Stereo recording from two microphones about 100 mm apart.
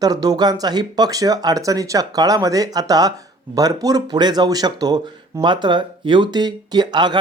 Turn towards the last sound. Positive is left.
turn(degrees=-45)  # may be behind; listen again after turning